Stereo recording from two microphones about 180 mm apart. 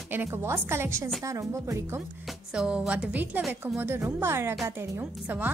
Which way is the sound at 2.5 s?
5° right (ahead or behind).